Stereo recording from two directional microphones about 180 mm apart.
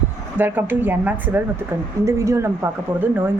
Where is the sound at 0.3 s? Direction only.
10° right (ahead or behind).